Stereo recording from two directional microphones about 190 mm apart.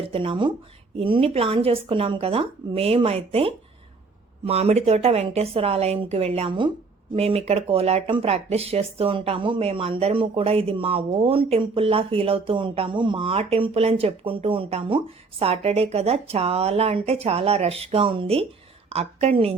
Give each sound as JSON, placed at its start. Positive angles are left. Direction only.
{"t": 0.0, "sound": "speech", "side_deg": -30}